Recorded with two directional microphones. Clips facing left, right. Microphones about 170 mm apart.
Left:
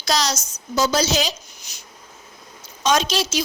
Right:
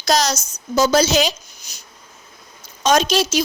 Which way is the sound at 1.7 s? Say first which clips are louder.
Right 3 dB; 40° right (ahead or behind).